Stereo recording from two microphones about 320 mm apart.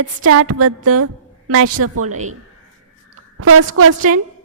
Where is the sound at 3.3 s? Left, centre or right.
Right.